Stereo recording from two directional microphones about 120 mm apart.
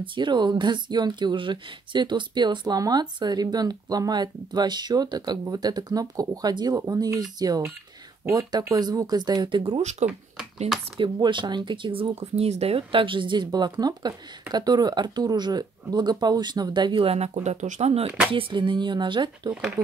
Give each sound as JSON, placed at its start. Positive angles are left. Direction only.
{"t": 0.0, "sound": "speech", "side_deg": -40}
{"t": 9.8, "sound": "speech", "side_deg": -70}
{"t": 11.0, "sound": "speech", "side_deg": -45}
{"t": 18.3, "sound": "speech", "side_deg": -45}